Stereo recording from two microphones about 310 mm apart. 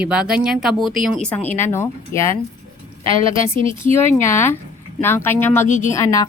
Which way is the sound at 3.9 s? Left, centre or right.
Centre.